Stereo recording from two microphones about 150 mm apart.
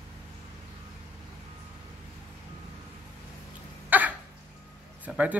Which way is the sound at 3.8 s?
10° right (ahead or behind).